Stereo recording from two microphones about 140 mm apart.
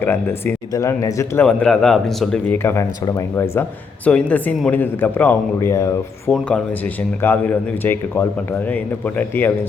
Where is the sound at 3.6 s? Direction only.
10° left (ahead or behind).